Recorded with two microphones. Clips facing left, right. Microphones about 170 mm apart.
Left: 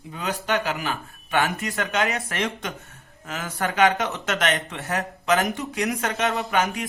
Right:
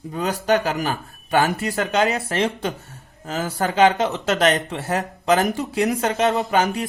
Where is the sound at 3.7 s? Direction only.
25° right (ahead or behind).